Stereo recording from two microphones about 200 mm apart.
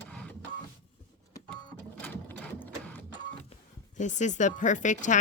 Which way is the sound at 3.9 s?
35° left (ahead or behind).